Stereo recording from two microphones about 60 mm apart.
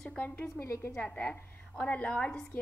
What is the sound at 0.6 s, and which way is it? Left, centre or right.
Speech, left.